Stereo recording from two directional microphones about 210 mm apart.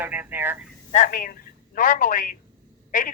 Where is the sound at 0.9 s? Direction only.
40° left (ahead or behind).